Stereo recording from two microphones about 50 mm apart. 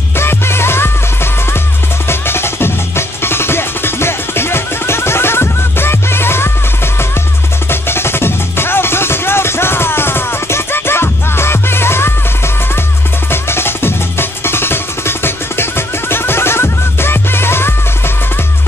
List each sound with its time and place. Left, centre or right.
0.2 s music: left
7.7 s music: left
13.3 s music: left